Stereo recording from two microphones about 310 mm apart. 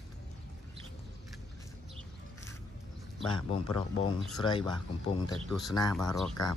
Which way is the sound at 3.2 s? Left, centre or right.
Centre.